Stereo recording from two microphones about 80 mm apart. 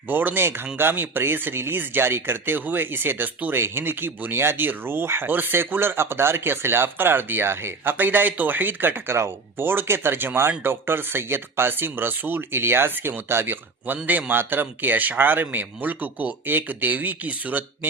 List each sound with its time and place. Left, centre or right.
0.1 s speech: right